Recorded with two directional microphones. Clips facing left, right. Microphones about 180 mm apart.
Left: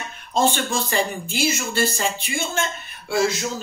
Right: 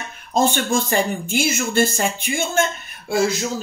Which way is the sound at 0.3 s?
45° right (ahead or behind).